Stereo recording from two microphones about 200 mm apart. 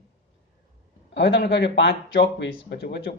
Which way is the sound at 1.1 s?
65° left (ahead or behind).